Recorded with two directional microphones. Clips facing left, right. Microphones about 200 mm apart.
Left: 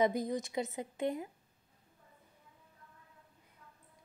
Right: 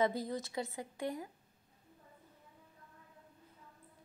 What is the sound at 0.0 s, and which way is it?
Speech, 20° left (ahead or behind).